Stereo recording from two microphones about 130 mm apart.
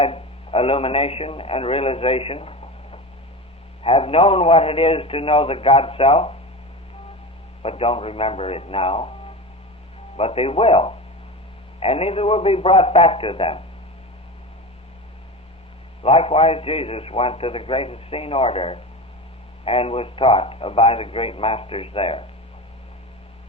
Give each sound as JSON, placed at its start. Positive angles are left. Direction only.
{"t": 0.0, "sound": "a man's voice", "side_deg": 45}
{"t": 7.6, "sound": "a man's voice", "side_deg": 45}
{"t": 16.0, "sound": "a man's voice", "side_deg": 50}